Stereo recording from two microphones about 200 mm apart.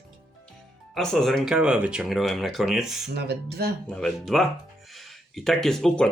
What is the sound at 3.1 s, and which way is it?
Speech, 55° right (ahead or behind).